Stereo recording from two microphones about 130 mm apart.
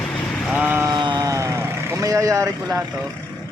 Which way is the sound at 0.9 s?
35° right (ahead or behind).